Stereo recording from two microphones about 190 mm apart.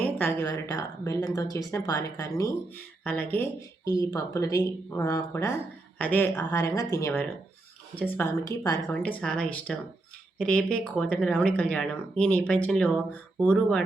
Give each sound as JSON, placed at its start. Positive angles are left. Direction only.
{"t": 0.0, "sound": "speech", "side_deg": 10}